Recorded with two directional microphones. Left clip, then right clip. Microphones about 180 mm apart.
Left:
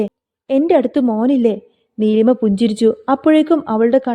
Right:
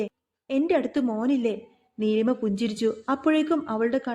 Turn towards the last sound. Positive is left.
turn(degrees=45)  # may be behind; listen again after turning